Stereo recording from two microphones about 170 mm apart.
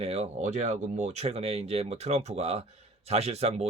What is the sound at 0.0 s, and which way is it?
Speech, 40° right (ahead or behind).